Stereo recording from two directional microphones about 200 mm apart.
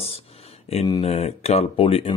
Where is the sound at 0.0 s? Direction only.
30° left (ahead or behind).